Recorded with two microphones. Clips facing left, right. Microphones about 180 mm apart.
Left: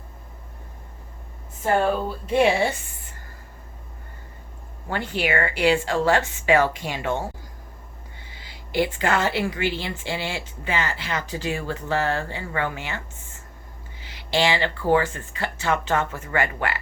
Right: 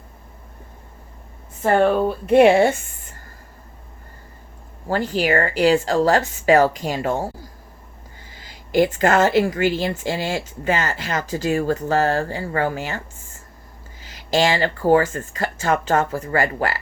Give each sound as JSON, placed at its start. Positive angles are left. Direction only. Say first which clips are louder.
{"t": 1.6, "sound": "speech", "louder": "right 5 dB", "side_deg": -60}
{"t": 4.9, "sound": "speech", "louder": "right 5 dB", "side_deg": -40}
{"t": 8.3, "sound": "a woman's voice", "louder": "right 7 dB", "side_deg": -45}